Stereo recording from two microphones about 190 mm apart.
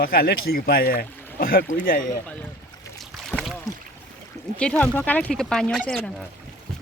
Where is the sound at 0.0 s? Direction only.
50° left (ahead or behind).